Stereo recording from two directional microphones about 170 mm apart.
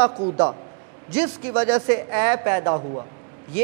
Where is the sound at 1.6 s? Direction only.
10° right (ahead or behind).